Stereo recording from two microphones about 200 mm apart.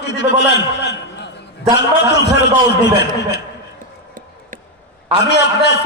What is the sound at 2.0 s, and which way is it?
Speech, 60° left (ahead or behind).